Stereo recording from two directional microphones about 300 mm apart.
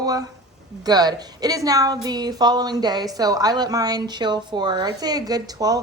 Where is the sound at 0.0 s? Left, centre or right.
Centre.